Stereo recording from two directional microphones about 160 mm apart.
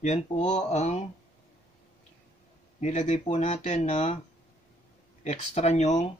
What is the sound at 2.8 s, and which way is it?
Speech, 45° left (ahead or behind).